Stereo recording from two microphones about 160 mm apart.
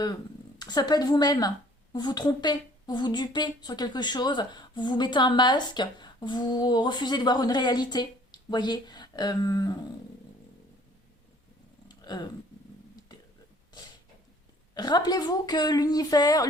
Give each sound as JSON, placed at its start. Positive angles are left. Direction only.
{"t": 0.6, "sound": "a woman's voice", "side_deg": 25}
{"t": 11.9, "sound": "a sound", "side_deg": 25}
{"t": 14.8, "sound": "a woman's voice", "side_deg": 25}